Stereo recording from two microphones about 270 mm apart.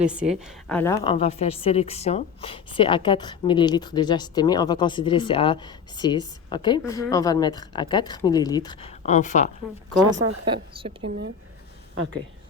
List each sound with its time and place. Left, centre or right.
0.0 s a woman's voice: centre
1.1 s a woman's voice: left
10.1 s a woman's voice: centre